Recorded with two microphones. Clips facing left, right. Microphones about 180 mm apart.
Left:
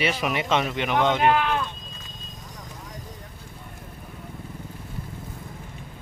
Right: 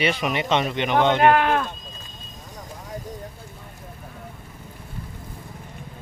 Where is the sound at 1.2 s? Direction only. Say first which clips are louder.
Right 4 dB; 55° right (ahead or behind).